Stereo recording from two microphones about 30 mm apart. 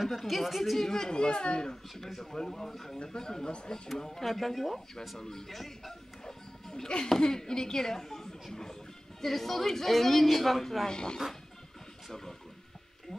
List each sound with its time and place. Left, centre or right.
0.3 s a woman's voice: centre
0.8 s a child's voice: centre
2.3 s speech: centre
3.0 s a child's voice: left
4.2 s a woman's voice: centre
6.2 s music: left
7.2 s speech: left
9.2 s a woman's voice: centre
10.9 s a child's voice: left